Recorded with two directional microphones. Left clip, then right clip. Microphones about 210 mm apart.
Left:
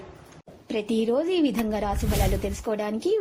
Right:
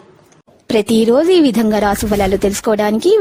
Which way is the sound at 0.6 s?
55° right (ahead or behind).